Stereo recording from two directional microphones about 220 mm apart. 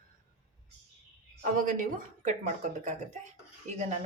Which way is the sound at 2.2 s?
30° right (ahead or behind).